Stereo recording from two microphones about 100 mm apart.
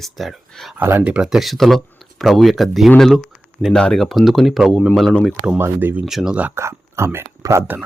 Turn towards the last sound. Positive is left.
turn(degrees=-30)  # may be behind; listen again after turning